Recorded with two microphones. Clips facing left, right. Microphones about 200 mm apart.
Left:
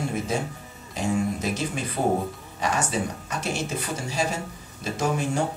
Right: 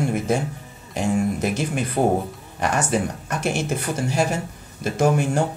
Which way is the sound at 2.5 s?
55° right (ahead or behind).